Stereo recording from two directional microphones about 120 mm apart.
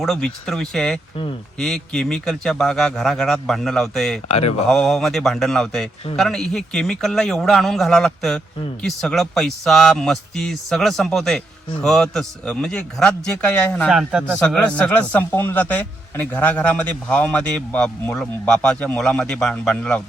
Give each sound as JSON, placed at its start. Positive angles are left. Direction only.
{"t": 0.0, "sound": "a man's voice", "side_deg": 5}
{"t": 4.3, "sound": "speech", "side_deg": 60}
{"t": 4.7, "sound": "a man's voice", "side_deg": 5}
{"t": 14.3, "sound": "a man's voice", "side_deg": 10}